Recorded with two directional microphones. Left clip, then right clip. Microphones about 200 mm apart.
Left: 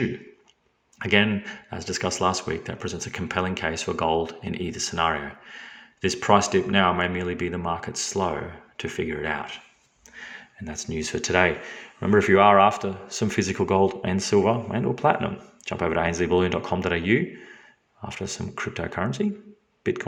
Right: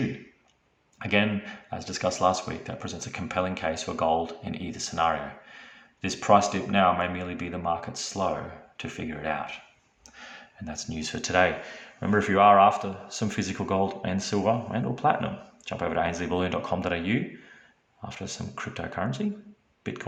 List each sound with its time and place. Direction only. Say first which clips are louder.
0.9 s speech: left 4 dB; 20° left (ahead or behind)